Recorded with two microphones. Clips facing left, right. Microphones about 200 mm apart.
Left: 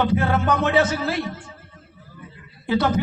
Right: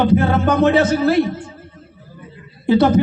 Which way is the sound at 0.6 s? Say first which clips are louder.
Right 6 dB; 45° right (ahead or behind).